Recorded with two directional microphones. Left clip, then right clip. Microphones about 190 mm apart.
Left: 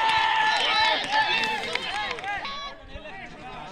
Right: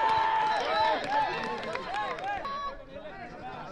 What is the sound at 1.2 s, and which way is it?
Run, 30° right (ahead or behind).